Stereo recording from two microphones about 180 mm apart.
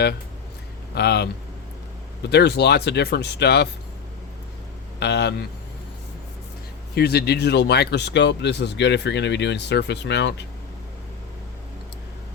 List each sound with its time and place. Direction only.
0.9 s speech: 65° left (ahead or behind)
2.3 s speech: 70° left (ahead or behind)
4.9 s speech: 70° left (ahead or behind)
6.9 s speech: 60° left (ahead or behind)